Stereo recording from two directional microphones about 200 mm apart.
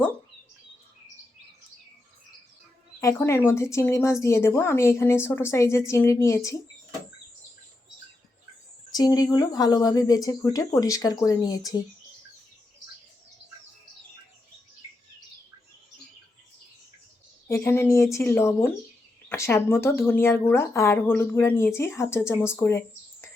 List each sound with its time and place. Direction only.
3.0 s speech: 15° left (ahead or behind)
8.9 s speech: 20° left (ahead or behind)
17.5 s speech: 10° left (ahead or behind)